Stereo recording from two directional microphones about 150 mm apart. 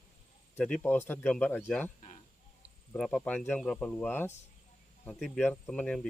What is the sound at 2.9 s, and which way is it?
Speech, 5° left (ahead or behind).